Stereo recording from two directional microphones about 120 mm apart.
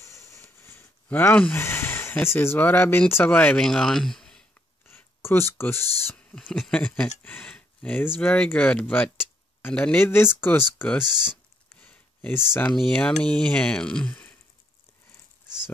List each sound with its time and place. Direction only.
0.0 s a sound: 25° left (ahead or behind)
3.6 s speech: 5° left (ahead or behind)
4.8 s speech: 20° left (ahead or behind)
6.4 s speech: centre (ahead or behind)
11.8 s a sound: 10° left (ahead or behind)
12.7 s speech: 5° left (ahead or behind)